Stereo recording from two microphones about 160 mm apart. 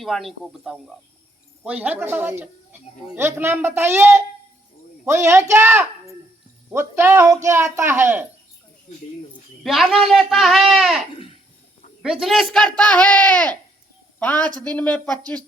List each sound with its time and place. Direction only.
0.0 s a man's voice: centre (ahead or behind)
9.6 s a man's voice: centre (ahead or behind)
12.0 s a man's voice: centre (ahead or behind)